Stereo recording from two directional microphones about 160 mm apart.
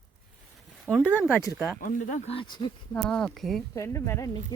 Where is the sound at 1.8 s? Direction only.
55° left (ahead or behind).